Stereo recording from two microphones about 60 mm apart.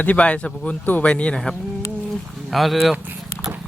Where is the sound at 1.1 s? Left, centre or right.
Centre.